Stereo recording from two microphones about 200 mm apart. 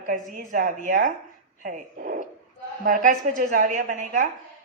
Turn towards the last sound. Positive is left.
turn(degrees=-40)  # may be behind; listen again after turning